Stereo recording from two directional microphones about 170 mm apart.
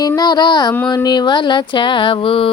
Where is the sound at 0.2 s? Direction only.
25° left (ahead or behind).